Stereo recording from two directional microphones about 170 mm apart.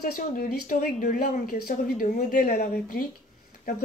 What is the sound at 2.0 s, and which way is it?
Speech, 55° left (ahead or behind).